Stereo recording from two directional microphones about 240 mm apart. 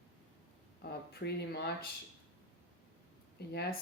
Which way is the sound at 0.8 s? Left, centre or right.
Left.